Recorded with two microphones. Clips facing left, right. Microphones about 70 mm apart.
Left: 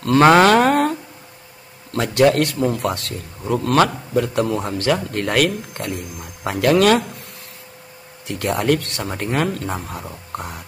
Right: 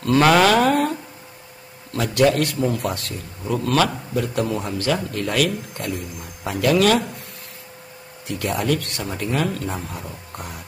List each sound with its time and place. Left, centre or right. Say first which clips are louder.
0.2 s a sound: left 4 dB; left
1.9 s a man's voice: left 3 dB; left
8.3 s speech: left 3 dB; left
9.9 s speech: left 4 dB; left